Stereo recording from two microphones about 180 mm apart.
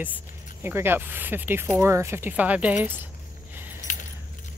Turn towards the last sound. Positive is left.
turn(degrees=45)  # may be behind; listen again after turning